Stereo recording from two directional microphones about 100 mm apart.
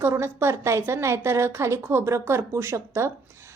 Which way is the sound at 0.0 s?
25° right (ahead or behind).